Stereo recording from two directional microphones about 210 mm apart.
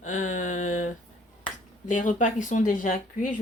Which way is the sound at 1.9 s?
35° left (ahead or behind).